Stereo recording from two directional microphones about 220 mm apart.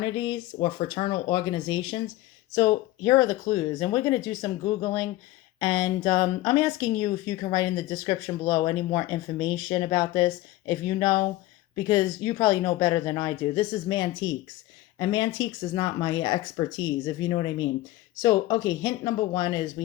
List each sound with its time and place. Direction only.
0.0 s speech: 20° left (ahead or behind)